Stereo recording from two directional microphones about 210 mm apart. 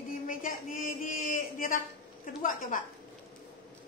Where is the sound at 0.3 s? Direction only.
40° left (ahead or behind).